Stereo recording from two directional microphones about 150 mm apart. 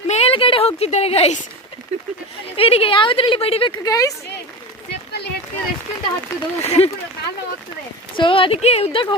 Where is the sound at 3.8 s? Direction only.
25° left (ahead or behind).